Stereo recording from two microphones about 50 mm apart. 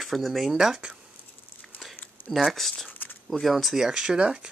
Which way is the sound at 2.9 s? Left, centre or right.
Left.